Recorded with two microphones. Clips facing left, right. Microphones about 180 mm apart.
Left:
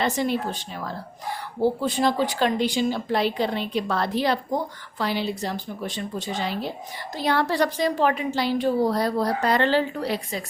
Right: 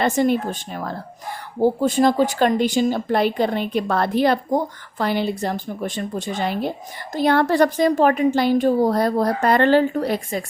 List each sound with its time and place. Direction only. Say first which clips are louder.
0.0 s a woman's voice: right 5 dB; 50° right (ahead or behind)